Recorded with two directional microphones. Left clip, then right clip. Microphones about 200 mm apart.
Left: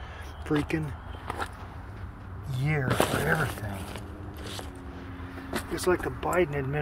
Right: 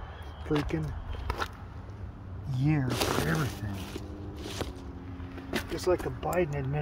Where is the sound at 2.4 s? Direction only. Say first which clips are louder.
Even; 5° left (ahead or behind).